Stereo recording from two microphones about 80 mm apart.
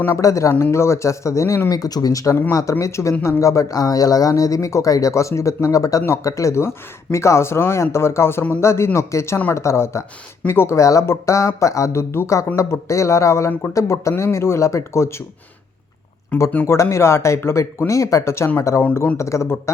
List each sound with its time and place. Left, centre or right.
0.2 s speech: left
1.7 s speech: left
2.3 s speech: left
16.3 s speech: left
16.6 s speech: left